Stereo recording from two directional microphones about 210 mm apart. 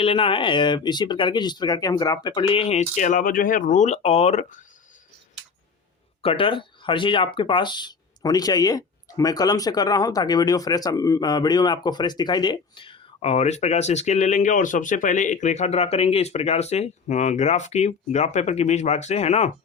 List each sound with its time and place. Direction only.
0.0 s speech: 25° left (ahead or behind)
6.2 s speech: 25° left (ahead or behind)